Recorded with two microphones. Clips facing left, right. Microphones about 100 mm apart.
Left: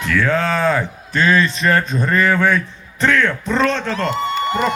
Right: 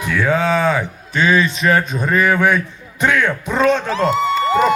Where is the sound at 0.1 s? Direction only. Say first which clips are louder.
Right 1 dB; 10° right (ahead or behind).